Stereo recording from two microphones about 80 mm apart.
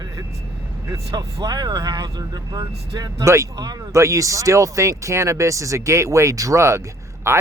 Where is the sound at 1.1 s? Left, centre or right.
Right.